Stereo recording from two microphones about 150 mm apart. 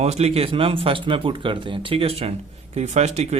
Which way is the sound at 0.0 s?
45° right (ahead or behind).